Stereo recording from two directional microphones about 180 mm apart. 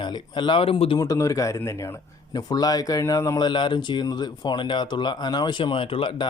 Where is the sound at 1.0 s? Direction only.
20° left (ahead or behind).